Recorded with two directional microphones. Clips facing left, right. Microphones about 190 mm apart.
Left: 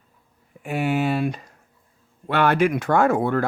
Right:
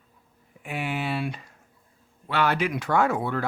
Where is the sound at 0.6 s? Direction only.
45° left (ahead or behind).